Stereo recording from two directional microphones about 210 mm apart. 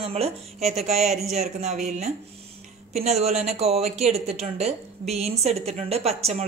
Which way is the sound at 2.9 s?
30° right (ahead or behind).